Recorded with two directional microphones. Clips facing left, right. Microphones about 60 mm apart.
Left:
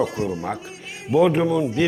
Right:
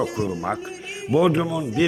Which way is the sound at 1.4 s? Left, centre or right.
Left.